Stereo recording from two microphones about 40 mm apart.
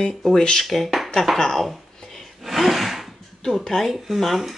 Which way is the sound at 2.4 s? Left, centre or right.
Centre.